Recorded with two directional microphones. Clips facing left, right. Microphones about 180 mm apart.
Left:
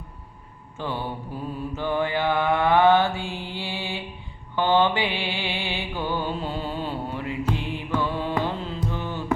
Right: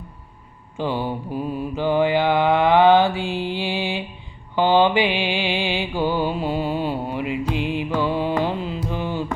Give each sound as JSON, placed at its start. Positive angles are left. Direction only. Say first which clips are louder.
{"t": 0.8, "sound": "mantra", "louder": "right 6 dB", "side_deg": -15}